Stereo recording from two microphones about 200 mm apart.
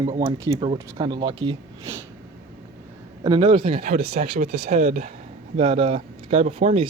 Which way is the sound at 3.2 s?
25° right (ahead or behind).